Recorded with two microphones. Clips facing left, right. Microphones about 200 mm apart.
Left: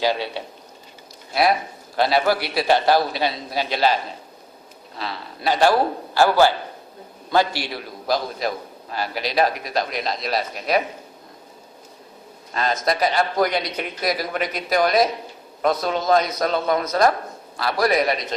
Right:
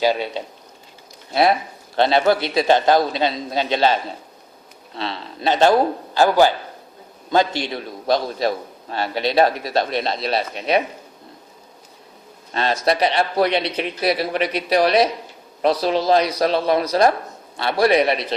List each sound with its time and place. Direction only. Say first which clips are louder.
0.0 s speech: right 3 dB; 15° right (ahead or behind)
1.3 s a man's voice: right 2 dB; 25° right (ahead or behind)
4.9 s a man's voice: right 3 dB; 25° right (ahead or behind)
12.5 s a man's voice: right 3 dB; 30° right (ahead or behind)